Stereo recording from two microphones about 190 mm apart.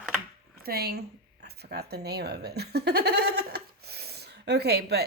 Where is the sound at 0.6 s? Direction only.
55° right (ahead or behind).